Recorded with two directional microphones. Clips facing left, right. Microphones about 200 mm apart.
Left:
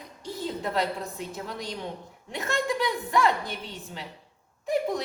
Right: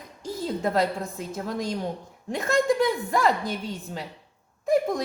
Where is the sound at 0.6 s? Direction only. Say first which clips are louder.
Right 5 dB; 45° right (ahead or behind).